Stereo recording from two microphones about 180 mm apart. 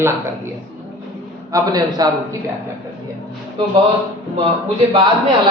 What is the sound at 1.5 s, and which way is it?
Speech, 20° right (ahead or behind).